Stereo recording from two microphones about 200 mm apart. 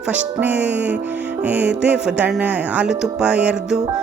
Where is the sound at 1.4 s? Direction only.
5° right (ahead or behind).